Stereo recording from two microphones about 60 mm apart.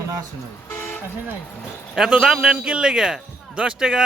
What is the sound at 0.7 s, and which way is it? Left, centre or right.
Toot, left.